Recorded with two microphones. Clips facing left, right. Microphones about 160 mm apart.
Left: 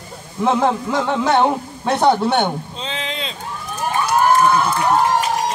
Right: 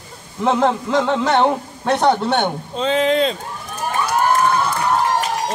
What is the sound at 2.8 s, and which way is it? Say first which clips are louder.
Speech: right 11 dB; 45° right (ahead or behind).